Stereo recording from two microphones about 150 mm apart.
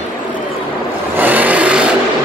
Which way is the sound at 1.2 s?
10° right (ahead or behind).